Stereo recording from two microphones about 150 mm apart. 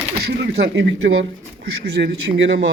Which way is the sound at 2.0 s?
90° right.